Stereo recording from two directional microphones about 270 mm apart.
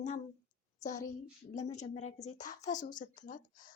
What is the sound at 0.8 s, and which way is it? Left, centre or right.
A woman's voice, left.